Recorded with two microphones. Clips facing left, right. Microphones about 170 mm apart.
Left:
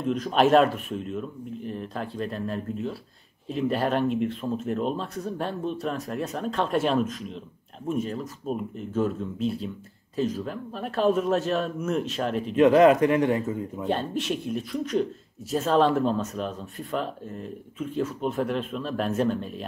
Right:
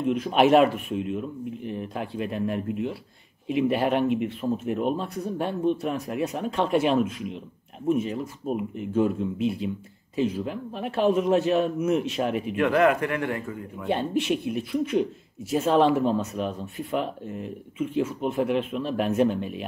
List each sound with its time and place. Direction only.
0.0 s speech: 10° right (ahead or behind)
12.5 s speech: 20° left (ahead or behind)
13.8 s speech: 10° right (ahead or behind)